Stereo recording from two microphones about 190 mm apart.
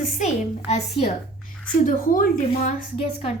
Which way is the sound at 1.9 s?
45° left (ahead or behind).